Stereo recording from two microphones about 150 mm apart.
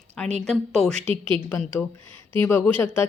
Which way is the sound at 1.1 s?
35° right (ahead or behind).